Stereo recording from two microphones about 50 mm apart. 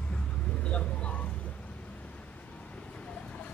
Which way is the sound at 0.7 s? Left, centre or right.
Left.